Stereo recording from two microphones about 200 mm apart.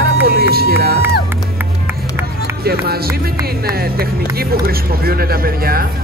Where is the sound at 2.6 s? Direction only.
50° right (ahead or behind).